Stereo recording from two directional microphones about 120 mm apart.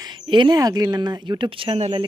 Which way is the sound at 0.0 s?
40° right (ahead or behind).